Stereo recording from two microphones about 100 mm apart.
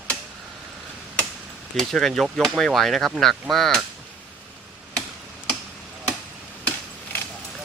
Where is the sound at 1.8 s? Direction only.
5° left (ahead or behind).